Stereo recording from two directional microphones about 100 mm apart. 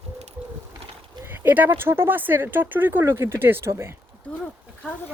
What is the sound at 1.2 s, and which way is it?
Speech, 20° right (ahead or behind).